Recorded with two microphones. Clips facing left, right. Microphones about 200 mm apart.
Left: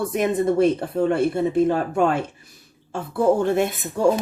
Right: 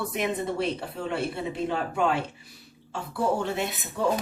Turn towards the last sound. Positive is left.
turn(degrees=50)  # may be behind; listen again after turning